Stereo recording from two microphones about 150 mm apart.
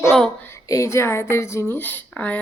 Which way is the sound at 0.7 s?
20° left (ahead or behind).